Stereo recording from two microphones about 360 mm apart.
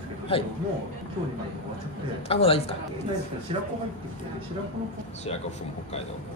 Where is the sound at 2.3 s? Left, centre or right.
Centre.